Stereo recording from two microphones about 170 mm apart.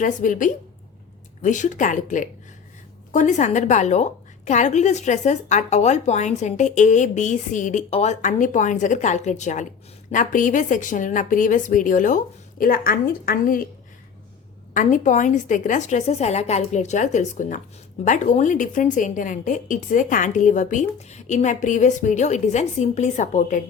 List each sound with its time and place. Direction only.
0.0 s a woman's voice: 50° left (ahead or behind)
14.7 s a woman's voice: 50° left (ahead or behind)